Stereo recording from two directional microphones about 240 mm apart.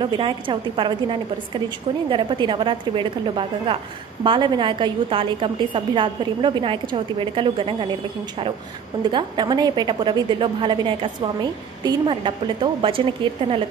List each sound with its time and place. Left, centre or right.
0.0 s a woman's voice: right
9.1 s a woman's voice: centre